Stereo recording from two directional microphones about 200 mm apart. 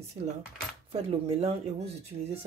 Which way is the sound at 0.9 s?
30° right (ahead or behind).